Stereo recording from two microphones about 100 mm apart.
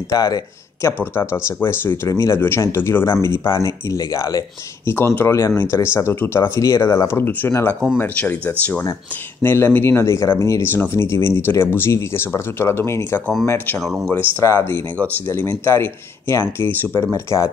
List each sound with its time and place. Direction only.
0.1 s speech: 40° left (ahead or behind)
1.1 s speech: 25° left (ahead or behind)
17.1 s speech: 30° left (ahead or behind)